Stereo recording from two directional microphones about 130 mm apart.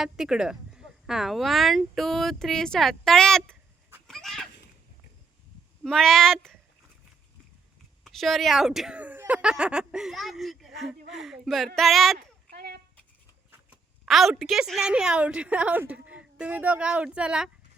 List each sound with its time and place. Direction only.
0.0 s speech: 5° right (ahead or behind)
3.5 s chicken: 15° right (ahead or behind)
4.0 s cat: centre (ahead or behind)
5.8 s speech: 5° left (ahead or behind)
8.0 s speech: centre (ahead or behind)
13.5 s duck: 10° right (ahead or behind)
14.1 s a woman's voice: centre (ahead or behind)